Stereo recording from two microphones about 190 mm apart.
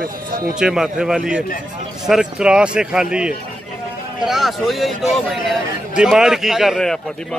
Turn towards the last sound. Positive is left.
turn(degrees=0)  # may be behind; listen again after turning